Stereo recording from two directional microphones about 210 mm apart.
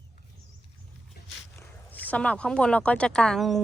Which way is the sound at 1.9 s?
10° left (ahead or behind).